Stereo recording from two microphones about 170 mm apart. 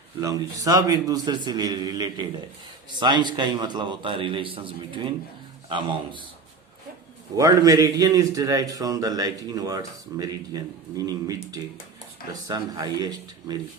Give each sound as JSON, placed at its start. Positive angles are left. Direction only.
{"t": 0.2, "sound": "a man's voice", "side_deg": -20}
{"t": 7.3, "sound": "a man's voice", "side_deg": -20}